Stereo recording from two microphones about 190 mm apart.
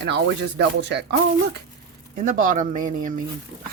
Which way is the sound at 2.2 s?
45° right (ahead or behind).